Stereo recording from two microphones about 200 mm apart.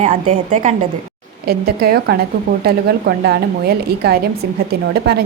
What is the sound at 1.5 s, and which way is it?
A woman's voice, 50° right (ahead or behind).